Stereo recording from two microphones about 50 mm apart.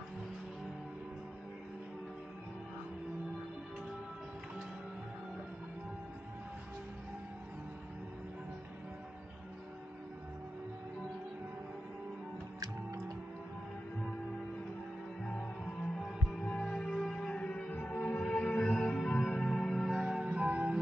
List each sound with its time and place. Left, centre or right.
15.2 s music: centre
17.4 s music: left; by 19.9 s centre
19.9 s music: centre
20.4 s music: right